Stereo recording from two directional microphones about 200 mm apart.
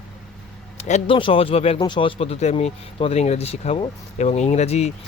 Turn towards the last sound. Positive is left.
turn(degrees=35)  # may be behind; listen again after turning